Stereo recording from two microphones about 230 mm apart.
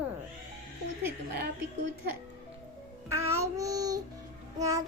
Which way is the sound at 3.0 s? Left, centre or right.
Centre.